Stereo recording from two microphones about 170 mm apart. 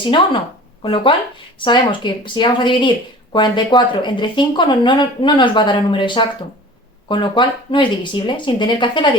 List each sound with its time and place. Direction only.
0.8 s speech: 30° left (ahead or behind)